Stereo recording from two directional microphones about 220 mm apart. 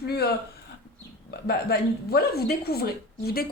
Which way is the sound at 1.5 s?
45° left (ahead or behind).